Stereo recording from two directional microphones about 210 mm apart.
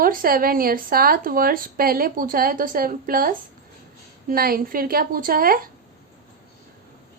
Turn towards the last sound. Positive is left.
turn(degrees=-45)  # may be behind; listen again after turning